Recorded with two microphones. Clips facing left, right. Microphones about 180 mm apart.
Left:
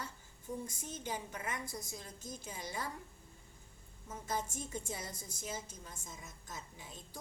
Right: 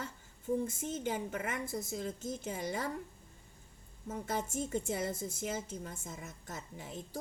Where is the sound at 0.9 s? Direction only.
60° right (ahead or behind).